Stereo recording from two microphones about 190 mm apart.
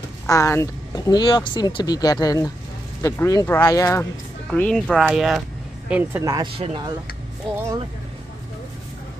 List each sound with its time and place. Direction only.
0.3 s speech: 15° left (ahead or behind)
4.5 s speech: 5° left (ahead or behind); by 6.9 s 25° right (ahead or behind)